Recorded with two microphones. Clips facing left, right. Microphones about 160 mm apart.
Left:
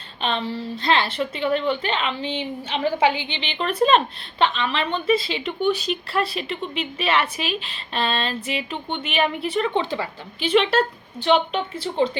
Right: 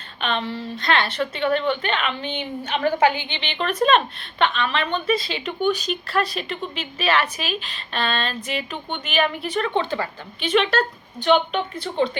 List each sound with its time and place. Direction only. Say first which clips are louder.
0.2 s a woman's voice: even; 30° left (ahead or behind)